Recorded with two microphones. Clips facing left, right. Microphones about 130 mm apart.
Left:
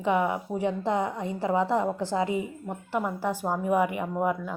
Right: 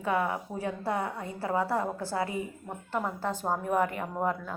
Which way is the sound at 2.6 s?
5° left (ahead or behind).